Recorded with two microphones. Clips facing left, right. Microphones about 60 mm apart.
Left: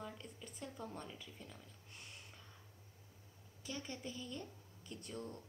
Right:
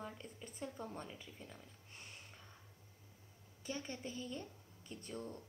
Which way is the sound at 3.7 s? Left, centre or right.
Centre.